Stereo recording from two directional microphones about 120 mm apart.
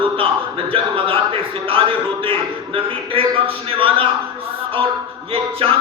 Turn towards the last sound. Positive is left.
turn(degrees=-50)  # may be behind; listen again after turning